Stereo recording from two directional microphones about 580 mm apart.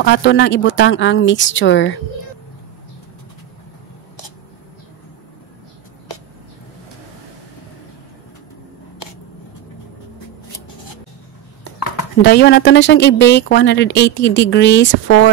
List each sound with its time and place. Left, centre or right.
0.0 s a woman's voice: centre
11.6 s speech: left